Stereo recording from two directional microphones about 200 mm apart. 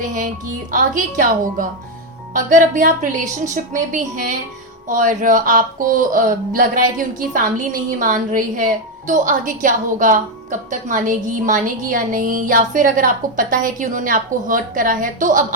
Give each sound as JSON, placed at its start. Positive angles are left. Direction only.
{"t": 0.0, "sound": "speech", "side_deg": -40}